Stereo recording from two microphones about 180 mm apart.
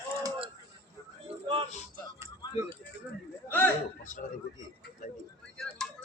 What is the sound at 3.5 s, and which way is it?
Hiccup, 10° left (ahead or behind).